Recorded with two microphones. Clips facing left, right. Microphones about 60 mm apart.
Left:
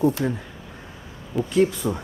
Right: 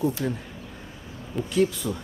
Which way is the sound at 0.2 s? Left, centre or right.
Centre.